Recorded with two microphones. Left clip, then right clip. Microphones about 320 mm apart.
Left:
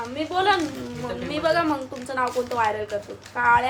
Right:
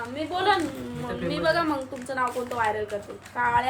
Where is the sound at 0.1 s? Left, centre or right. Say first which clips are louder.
Left 2 dB; centre.